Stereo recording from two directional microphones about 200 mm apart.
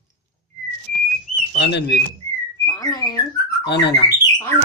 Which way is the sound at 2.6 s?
20° left (ahead or behind).